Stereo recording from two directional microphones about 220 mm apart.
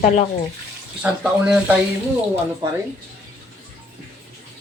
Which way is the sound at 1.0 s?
5° right (ahead or behind).